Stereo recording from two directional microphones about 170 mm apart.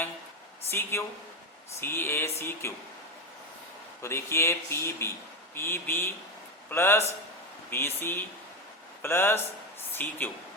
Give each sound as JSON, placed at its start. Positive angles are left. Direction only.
{"t": 0.7, "sound": "speech", "side_deg": 15}
{"t": 4.0, "sound": "speech", "side_deg": 15}